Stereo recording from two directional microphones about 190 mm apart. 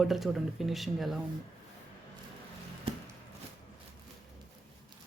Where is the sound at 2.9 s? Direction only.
30° right (ahead or behind).